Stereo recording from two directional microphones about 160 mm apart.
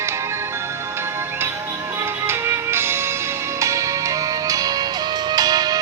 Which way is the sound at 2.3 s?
15° right (ahead or behind).